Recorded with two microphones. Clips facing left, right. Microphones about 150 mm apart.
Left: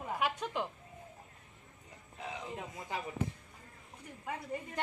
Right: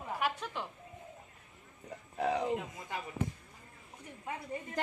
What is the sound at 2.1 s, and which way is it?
Speech, 65° right (ahead or behind).